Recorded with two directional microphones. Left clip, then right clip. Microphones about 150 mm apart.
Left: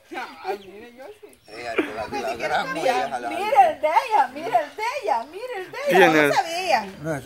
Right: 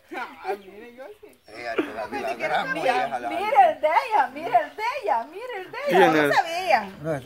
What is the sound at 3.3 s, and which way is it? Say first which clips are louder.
Speech: left 1 dB; 20° left (ahead or behind).